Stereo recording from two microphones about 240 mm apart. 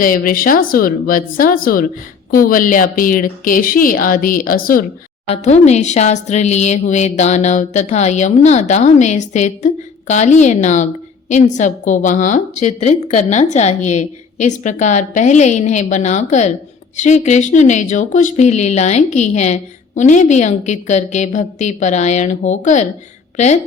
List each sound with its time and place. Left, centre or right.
0.0 s a woman's voice: left